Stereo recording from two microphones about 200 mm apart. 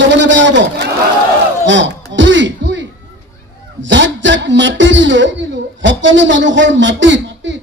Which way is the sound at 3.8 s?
65° right (ahead or behind).